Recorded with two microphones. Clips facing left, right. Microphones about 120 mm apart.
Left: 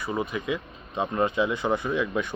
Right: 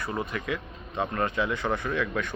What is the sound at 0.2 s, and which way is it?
Speech, 20° left (ahead or behind).